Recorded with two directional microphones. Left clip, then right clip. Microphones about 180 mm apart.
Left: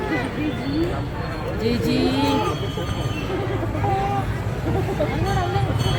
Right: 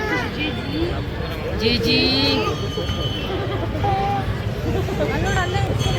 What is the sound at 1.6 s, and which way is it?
Speech, 25° left (ahead or behind).